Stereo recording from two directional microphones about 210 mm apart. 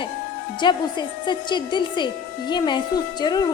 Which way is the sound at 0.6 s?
20° left (ahead or behind).